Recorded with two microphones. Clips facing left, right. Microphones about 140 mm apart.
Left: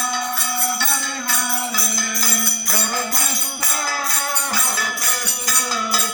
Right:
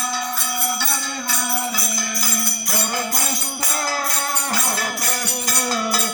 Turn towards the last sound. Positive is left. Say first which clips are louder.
# right 1 dB
turn(degrees=-45)  # may be behind; listen again after turning